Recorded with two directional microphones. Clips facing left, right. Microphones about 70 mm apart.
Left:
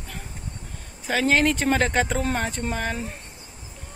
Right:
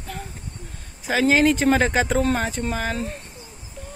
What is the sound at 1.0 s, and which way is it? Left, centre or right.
Speech, centre.